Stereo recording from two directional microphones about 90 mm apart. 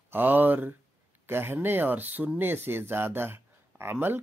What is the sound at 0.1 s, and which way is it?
Speech, 20° right (ahead or behind).